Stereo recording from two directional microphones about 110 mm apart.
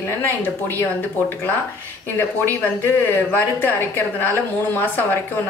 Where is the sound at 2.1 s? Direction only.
20° left (ahead or behind).